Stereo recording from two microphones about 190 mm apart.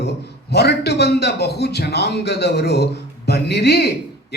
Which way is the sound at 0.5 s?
60° left (ahead or behind).